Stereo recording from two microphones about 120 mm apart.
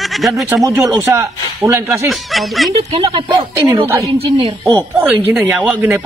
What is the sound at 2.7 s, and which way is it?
Speech, 55° right (ahead or behind).